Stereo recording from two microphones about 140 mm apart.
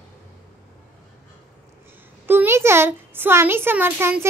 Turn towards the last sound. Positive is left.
turn(degrees=-15)  # may be behind; listen again after turning